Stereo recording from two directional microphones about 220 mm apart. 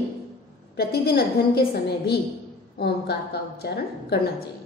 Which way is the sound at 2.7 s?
45° left (ahead or behind).